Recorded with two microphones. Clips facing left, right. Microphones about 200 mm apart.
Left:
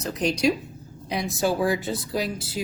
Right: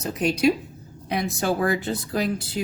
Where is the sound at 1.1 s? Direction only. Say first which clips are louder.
Even; 55° right (ahead or behind).